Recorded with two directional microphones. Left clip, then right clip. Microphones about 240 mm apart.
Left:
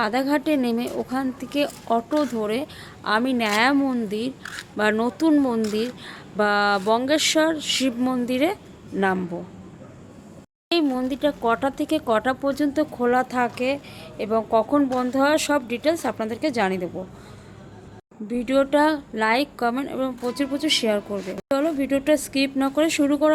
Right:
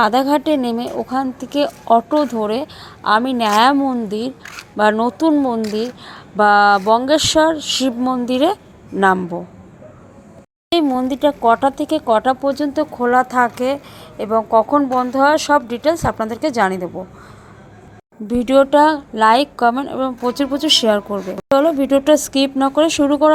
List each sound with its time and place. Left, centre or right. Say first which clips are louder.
0.0 s a woman's voice: right 8 dB; centre
10.7 s a woman's voice: right 6 dB; centre
18.3 s a woman's voice: right 8 dB; centre